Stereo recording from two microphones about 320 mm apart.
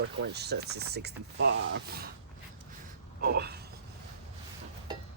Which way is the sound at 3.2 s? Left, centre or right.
Right.